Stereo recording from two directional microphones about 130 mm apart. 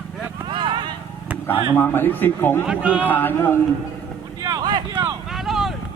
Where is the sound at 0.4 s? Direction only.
40° right (ahead or behind).